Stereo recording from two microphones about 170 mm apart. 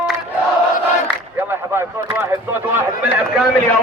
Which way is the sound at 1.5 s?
15° right (ahead or behind).